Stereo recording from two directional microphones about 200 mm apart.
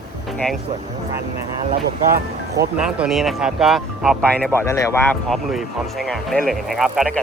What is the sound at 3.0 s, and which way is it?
Speech, centre (ahead or behind).